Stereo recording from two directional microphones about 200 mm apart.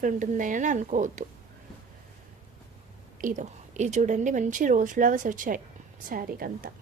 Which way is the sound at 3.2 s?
40° right (ahead or behind).